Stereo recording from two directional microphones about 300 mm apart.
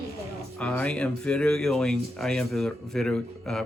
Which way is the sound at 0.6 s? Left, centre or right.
Centre.